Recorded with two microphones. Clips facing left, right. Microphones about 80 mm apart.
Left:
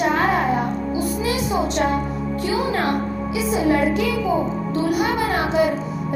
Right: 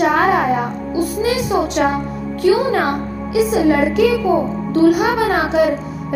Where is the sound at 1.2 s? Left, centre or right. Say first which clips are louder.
Right 5 dB; right.